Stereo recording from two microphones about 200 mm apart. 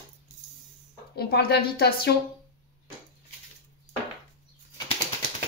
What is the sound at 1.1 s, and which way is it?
A woman's voice, 50° left (ahead or behind).